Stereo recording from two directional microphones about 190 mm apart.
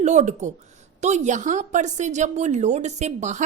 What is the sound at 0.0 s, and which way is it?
A woman's voice, 35° right (ahead or behind).